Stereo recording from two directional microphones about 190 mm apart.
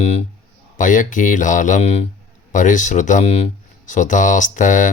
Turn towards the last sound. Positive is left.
turn(degrees=40)  # may be behind; listen again after turning